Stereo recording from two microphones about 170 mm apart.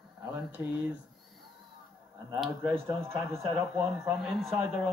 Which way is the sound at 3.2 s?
15° right (ahead or behind).